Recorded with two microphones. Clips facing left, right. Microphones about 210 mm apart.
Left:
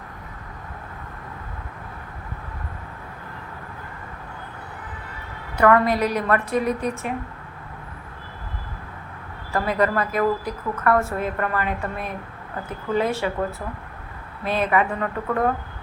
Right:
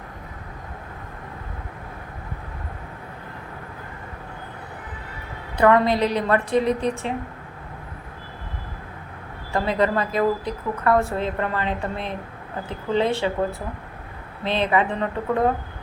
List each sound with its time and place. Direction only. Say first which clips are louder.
5.5 s a woman's voice: right 1 dB; 20° right (ahead or behind)
9.5 s a woman's voice: even; 25° right (ahead or behind)
14.6 s a woman's voice: even; 25° right (ahead or behind)